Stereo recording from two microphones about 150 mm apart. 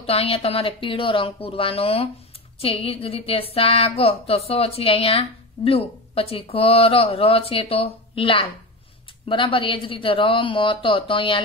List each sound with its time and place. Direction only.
0.0 s a woman's voice: 40° left (ahead or behind)